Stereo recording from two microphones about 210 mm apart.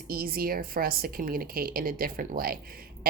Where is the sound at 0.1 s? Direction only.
45° right (ahead or behind).